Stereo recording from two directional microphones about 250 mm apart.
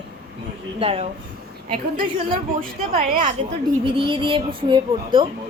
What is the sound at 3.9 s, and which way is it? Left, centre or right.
A woman's voice, centre.